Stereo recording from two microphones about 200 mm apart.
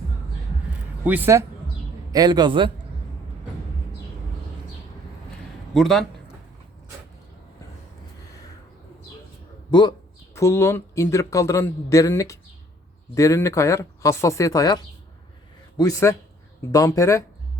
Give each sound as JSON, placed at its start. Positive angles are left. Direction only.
{"t": 1.0, "sound": "a man's voice", "side_deg": -10}
{"t": 5.7, "sound": "a man's voice", "side_deg": 0}
{"t": 10.3, "sound": "a man's voice", "side_deg": 15}
{"t": 15.8, "sound": "a man's voice", "side_deg": 15}